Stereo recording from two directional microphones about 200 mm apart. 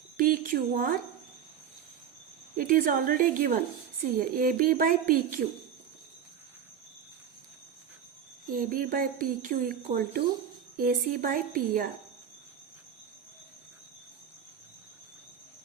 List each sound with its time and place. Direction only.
0.2 s speech: 45° right (ahead or behind)
2.6 s speech: 45° right (ahead or behind)
8.4 s speech: 45° right (ahead or behind)